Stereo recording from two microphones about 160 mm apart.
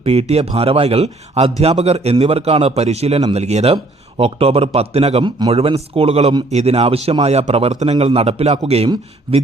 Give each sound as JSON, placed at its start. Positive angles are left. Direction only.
{"t": 0.0, "sound": "a man's voice", "side_deg": -40}